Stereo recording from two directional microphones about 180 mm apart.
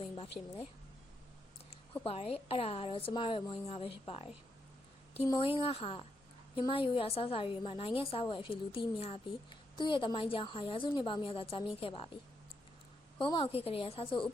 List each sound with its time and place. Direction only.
0.0 s a woman's voice: 30° left (ahead or behind)
2.0 s a woman's voice: 30° left (ahead or behind)
5.5 s a woman's voice: 30° left (ahead or behind)